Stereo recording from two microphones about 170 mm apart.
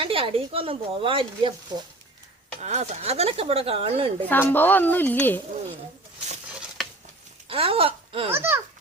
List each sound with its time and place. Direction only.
0.0 s speech: 30° right (ahead or behind)
2.6 s speech: 40° right (ahead or behind)
4.3 s speech: 10° left (ahead or behind)
7.4 s speech: 35° right (ahead or behind)
8.3 s a child's voice: 15° right (ahead or behind)